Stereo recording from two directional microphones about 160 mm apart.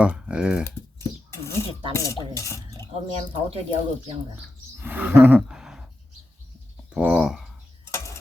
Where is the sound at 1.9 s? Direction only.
20° left (ahead or behind).